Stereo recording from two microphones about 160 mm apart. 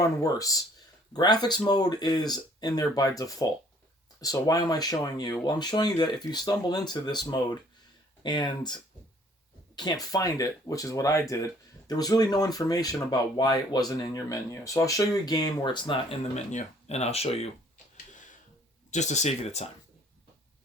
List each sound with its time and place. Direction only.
0.0 s speech: 20° left (ahead or behind); by 17.5 s 40° left (ahead or behind)
18.9 s speech: 45° left (ahead or behind)